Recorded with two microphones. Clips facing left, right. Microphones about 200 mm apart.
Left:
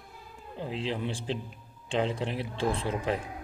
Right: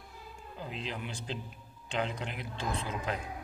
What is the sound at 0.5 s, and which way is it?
A man's voice, 30° left (ahead or behind).